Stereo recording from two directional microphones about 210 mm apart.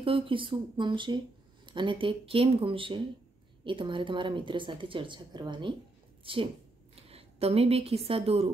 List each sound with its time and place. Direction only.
0.0 s a woman's voice: 25° right (ahead or behind)